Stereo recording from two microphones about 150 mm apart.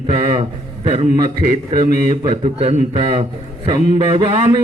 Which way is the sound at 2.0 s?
35° right (ahead or behind).